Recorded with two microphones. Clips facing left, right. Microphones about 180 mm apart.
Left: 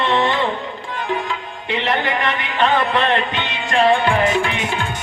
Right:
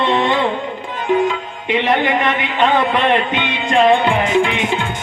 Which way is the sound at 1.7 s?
20° right (ahead or behind).